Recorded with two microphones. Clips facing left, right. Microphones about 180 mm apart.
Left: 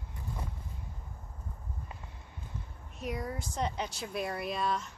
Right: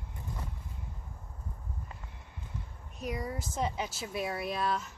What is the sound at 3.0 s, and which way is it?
Speech, centre (ahead or behind).